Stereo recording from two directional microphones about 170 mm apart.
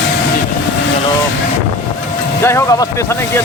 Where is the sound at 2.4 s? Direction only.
15° left (ahead or behind).